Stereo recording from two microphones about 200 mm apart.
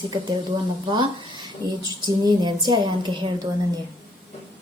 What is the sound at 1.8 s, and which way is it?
Speech, 20° right (ahead or behind).